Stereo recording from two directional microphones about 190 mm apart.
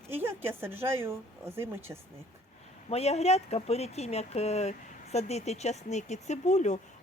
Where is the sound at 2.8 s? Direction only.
35° left (ahead or behind).